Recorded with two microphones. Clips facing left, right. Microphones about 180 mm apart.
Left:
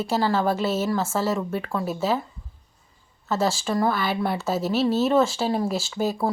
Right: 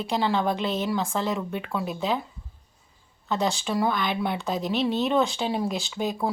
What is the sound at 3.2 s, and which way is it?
Speech, 5° left (ahead or behind).